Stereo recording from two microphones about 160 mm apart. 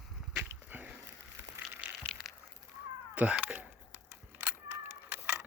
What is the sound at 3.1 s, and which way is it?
Cat, 10° right (ahead or behind).